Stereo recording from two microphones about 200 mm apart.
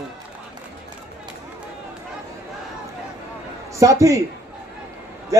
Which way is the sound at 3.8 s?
15° right (ahead or behind).